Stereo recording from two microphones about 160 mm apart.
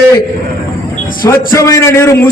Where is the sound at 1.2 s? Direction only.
20° left (ahead or behind).